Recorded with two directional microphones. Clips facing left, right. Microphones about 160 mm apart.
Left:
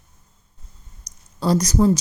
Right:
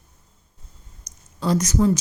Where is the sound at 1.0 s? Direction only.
35° left (ahead or behind).